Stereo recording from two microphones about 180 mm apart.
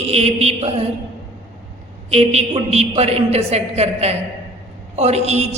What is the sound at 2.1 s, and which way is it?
A woman's voice, 35° right (ahead or behind).